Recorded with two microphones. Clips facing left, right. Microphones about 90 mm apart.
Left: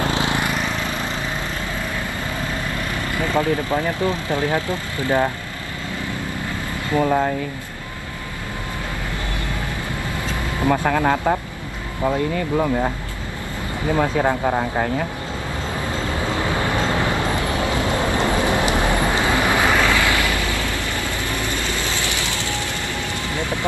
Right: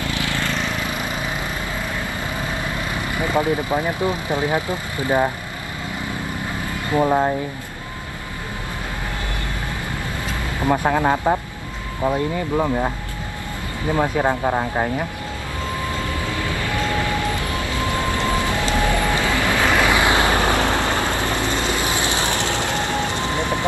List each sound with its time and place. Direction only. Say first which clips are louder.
0.1 s vehicle: left 3 dB; 20° left (ahead or behind)
3.2 s speech: even; 15° right (ahead or behind)
6.9 s speech: right 1 dB; 15° right (ahead or behind)
10.7 s speech: right 1 dB; 15° right (ahead or behind)
13.9 s speech: even; 15° right (ahead or behind)
16.0 s vehicle: left 2 dB; 20° left (ahead or behind)
19.8 s vehicle: right 2 dB; 20° right (ahead or behind)
20.3 s vehicle: right 6 dB; 55° right (ahead or behind)
21.8 s vehicle: right 3 dB; 20° right (ahead or behind)